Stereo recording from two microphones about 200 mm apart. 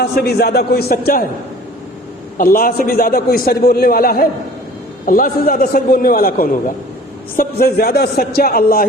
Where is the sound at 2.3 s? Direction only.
45° left (ahead or behind).